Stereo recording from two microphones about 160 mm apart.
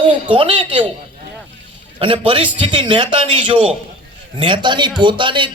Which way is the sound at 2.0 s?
35° right (ahead or behind).